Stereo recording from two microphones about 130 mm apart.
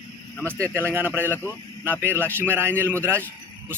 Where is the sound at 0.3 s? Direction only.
10° left (ahead or behind).